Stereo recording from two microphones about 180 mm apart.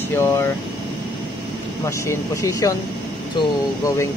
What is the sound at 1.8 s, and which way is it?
Speech, 15° left (ahead or behind).